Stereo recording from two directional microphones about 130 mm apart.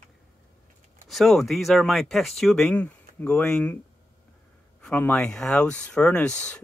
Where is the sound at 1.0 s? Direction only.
Centre (ahead or behind).